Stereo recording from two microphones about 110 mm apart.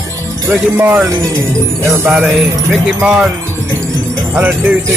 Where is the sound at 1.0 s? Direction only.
30° right (ahead or behind).